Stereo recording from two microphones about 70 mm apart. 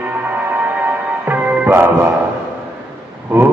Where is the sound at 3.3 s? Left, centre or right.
Right.